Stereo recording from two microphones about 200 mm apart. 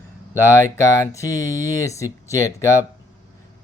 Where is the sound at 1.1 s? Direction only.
15° left (ahead or behind).